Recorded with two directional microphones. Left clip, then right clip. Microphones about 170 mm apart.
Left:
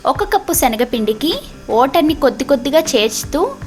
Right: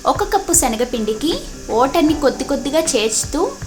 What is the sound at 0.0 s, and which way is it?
A woman's voice, 25° left (ahead or behind).